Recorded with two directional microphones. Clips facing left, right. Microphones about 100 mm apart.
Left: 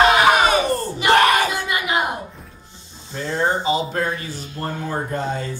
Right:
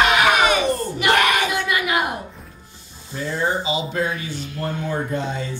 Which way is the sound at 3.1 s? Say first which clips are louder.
Left 2 dB; 25° left (ahead or behind).